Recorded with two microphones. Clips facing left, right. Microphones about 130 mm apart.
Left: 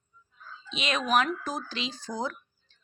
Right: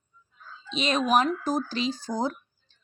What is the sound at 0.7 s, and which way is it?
A woman's voice, 35° right (ahead or behind).